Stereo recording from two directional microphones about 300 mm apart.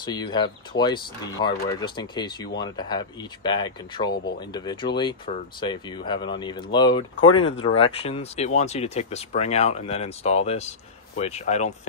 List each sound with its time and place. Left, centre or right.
0.0 s speech: centre